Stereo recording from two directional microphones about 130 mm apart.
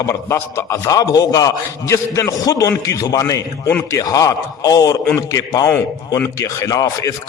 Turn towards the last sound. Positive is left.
turn(degrees=25)  # may be behind; listen again after turning